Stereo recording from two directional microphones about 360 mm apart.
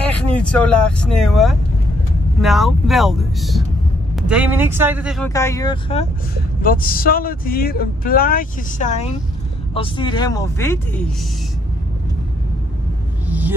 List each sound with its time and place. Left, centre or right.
0.0 s speech: centre